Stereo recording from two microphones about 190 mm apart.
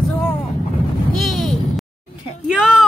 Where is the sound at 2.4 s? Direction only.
Centre (ahead or behind).